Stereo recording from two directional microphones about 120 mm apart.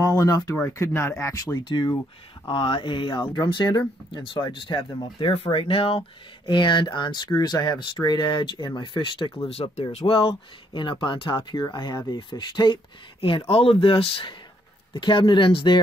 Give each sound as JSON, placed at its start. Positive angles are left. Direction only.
{"t": 0.0, "sound": "speech", "side_deg": 30}
{"t": 1.6, "sound": "speech", "side_deg": 40}
{"t": 9.4, "sound": "speech", "side_deg": 55}
{"t": 13.5, "sound": "speech", "side_deg": 50}